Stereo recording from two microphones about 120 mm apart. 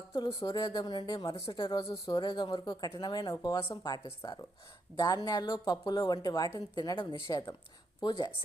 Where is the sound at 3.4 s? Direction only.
25° left (ahead or behind).